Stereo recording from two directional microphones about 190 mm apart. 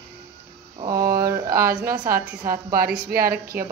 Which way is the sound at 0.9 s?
50° right (ahead or behind).